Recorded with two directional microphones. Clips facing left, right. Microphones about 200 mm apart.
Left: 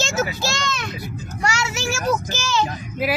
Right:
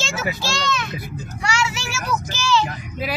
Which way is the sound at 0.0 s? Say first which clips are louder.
Left 3 dB; 45° left (ahead or behind).